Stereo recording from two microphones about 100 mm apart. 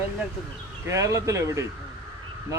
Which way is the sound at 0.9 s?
30° right (ahead or behind).